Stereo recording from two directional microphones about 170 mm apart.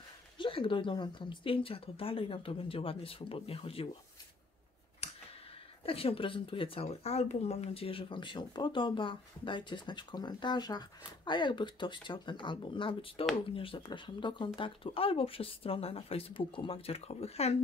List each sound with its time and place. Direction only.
0.4 s speech: 30° left (ahead or behind)
5.0 s clicking: 40° left (ahead or behind)
5.9 s speech: 35° left (ahead or behind)